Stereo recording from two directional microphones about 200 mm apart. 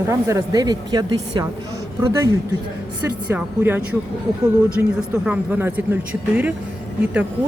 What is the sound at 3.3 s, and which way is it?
Speech, 10° right (ahead or behind).